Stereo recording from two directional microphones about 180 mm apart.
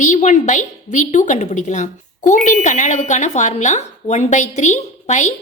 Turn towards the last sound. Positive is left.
turn(degrees=40)  # may be behind; listen again after turning